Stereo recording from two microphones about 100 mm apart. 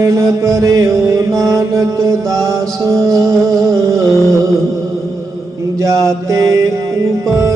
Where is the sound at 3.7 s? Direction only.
5° left (ahead or behind).